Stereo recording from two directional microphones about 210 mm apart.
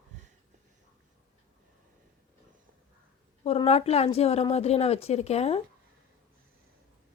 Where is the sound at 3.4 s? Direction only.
30° left (ahead or behind).